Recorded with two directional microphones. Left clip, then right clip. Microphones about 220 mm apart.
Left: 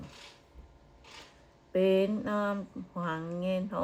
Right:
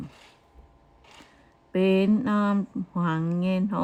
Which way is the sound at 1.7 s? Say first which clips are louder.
Right 3 dB; 35° right (ahead or behind).